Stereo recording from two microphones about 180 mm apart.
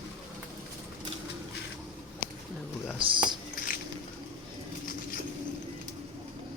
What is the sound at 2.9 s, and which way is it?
Speech, 30° right (ahead or behind).